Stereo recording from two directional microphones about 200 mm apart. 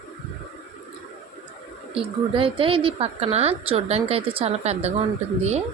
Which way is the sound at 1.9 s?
25° right (ahead or behind).